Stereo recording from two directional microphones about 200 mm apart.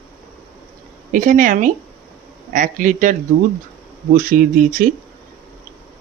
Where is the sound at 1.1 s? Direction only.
40° right (ahead or behind).